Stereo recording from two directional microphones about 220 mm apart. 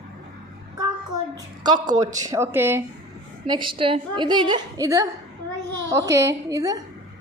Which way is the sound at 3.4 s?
20° right (ahead or behind).